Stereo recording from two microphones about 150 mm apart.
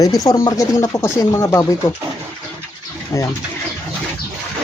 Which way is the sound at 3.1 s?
20° left (ahead or behind).